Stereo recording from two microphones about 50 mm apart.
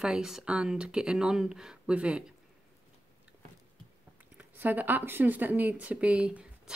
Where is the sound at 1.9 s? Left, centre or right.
Right.